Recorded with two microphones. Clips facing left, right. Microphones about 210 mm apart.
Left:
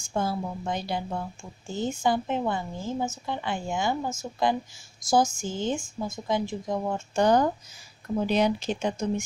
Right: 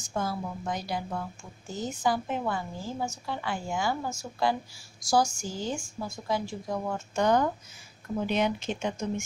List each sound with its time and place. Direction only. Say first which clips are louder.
0.1 s a woman's voice: left 3 dB; 30° left (ahead or behind)
7.2 s speech: left 3 dB; 35° left (ahead or behind)